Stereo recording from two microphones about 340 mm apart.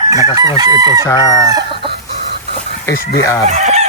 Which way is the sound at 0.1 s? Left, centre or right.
Centre.